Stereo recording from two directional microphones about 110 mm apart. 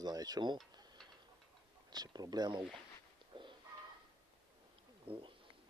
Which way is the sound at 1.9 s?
35° right (ahead or behind).